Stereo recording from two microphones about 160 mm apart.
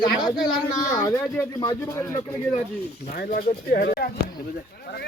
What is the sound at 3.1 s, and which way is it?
Speech, 65° left (ahead or behind).